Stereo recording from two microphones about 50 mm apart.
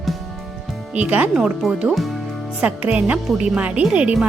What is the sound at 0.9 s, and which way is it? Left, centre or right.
Speech, right.